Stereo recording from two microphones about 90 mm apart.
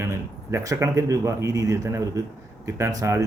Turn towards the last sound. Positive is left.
turn(degrees=-35)  # may be behind; listen again after turning